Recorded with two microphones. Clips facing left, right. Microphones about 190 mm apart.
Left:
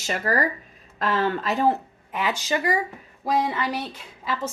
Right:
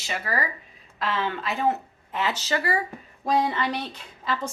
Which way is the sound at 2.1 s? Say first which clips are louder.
Left 1 dB; 10° left (ahead or behind).